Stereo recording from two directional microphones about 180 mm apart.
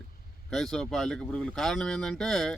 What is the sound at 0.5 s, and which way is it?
Speech, centre (ahead or behind).